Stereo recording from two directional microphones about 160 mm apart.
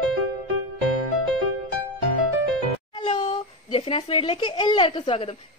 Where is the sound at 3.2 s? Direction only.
40° left (ahead or behind).